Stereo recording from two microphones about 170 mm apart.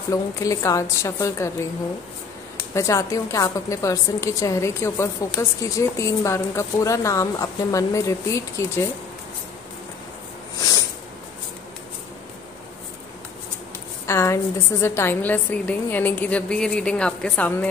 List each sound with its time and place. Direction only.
0.1 s a woman's voice: 20° left (ahead or behind)
2.7 s a woman's voice: 20° left (ahead or behind)
14.0 s a woman's voice: 15° left (ahead or behind)